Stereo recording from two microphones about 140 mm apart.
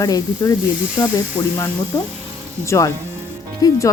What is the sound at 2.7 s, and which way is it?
Speech, 25° left (ahead or behind).